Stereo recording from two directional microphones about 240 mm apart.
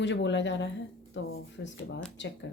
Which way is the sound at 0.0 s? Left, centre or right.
Left.